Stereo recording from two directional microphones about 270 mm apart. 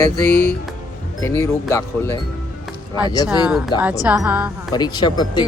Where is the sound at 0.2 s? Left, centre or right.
Centre.